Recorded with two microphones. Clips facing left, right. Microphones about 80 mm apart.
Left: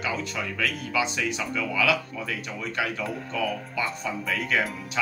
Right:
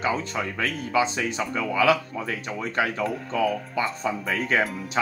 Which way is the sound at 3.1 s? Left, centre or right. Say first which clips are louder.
Right 4 dB; centre.